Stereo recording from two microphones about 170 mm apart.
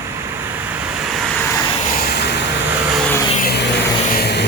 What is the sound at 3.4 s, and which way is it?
Vehicle, 70° left (ahead or behind).